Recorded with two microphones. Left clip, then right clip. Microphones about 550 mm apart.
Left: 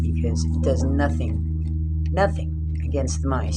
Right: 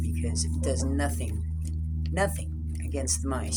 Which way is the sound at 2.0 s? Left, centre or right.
Right.